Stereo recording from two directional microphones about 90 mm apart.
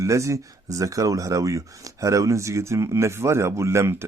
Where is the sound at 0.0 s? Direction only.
35° right (ahead or behind).